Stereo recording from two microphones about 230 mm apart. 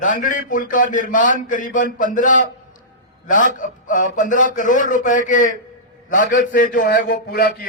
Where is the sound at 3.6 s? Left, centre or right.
Left.